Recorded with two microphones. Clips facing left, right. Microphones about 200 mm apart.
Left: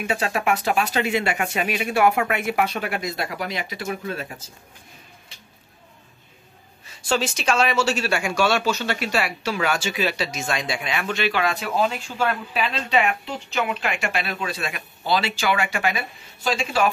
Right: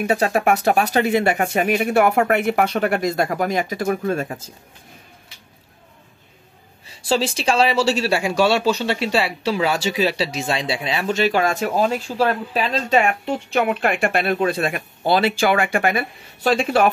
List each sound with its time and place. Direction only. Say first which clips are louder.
0.0 s speech: right 6 dB; 40° right (ahead or behind)
7.0 s speech: right 3 dB; 30° right (ahead or behind); by 16.9 s 55° right (ahead or behind)